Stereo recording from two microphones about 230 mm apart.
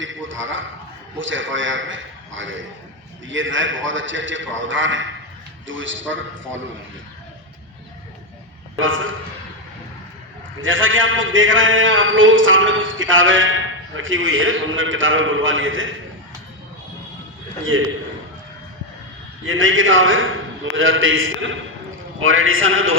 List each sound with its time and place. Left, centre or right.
0.0 s a man's voice: right
8.8 s a man's voice: right
10.6 s a man's voice: right
17.7 s a man's voice: right
19.5 s a man's voice: right